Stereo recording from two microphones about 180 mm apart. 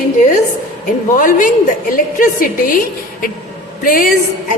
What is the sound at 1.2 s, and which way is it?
A woman's voice, 50° left (ahead or behind).